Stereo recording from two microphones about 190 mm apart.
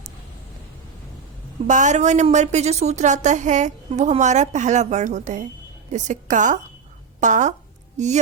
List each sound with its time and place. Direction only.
1.6 s a woman's voice: 40° right (ahead or behind)